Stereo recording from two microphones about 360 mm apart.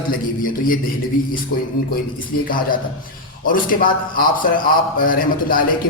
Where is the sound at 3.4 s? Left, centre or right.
Left.